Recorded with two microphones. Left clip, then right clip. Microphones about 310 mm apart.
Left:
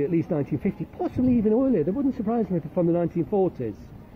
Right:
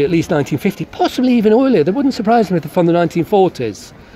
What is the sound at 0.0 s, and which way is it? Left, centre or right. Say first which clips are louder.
Speech: right 11 dB; right.